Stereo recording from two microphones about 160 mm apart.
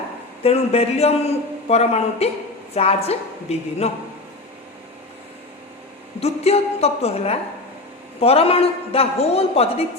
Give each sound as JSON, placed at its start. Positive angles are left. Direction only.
{"t": 0.4, "sound": "a man's voice", "side_deg": 40}
{"t": 6.1, "sound": "a man's voice", "side_deg": 40}